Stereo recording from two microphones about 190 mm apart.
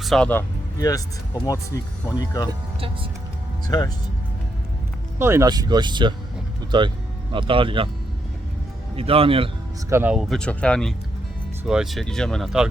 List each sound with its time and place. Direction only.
0.0 s speech: 5° left (ahead or behind); by 2.5 s 20° left (ahead or behind)
2.5 s speech: 30° right (ahead or behind)
3.7 s speech: 20° left (ahead or behind)
5.2 s speech: 15° right (ahead or behind)
9.0 s speech: 30° right (ahead or behind)
9.9 s speech: 10° right (ahead or behind)